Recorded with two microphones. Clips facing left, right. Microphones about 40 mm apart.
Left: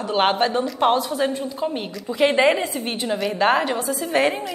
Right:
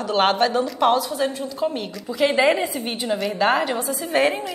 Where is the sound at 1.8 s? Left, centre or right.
Left.